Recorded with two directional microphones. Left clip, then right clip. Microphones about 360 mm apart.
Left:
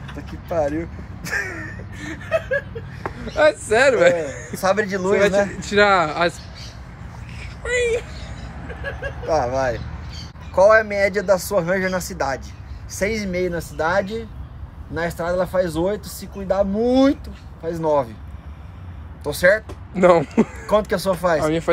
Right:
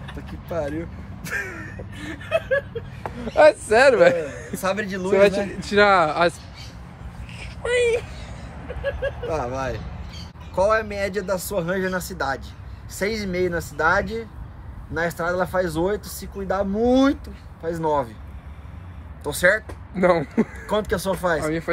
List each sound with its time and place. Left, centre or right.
0.5 s speech: centre
2.0 s speech: right
3.0 s speech: centre
7.3 s a sound: centre
9.3 s speech: centre
19.2 s speech: centre